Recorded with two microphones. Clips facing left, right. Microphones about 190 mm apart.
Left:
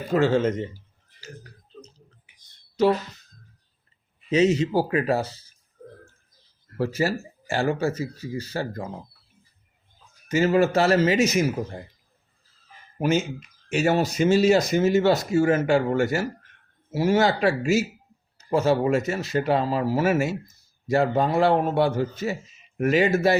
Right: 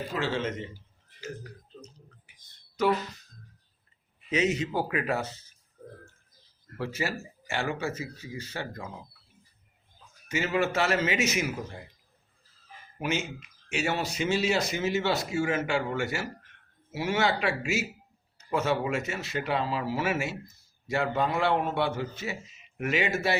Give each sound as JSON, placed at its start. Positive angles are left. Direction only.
{"t": 0.1, "sound": "speech", "side_deg": 45}
{"t": 2.8, "sound": "speech", "side_deg": 30}
{"t": 4.3, "sound": "speech", "side_deg": 30}
{"t": 6.7, "sound": "speech", "side_deg": 40}
{"t": 10.2, "sound": "speech", "side_deg": 40}
{"t": 13.0, "sound": "speech", "side_deg": 40}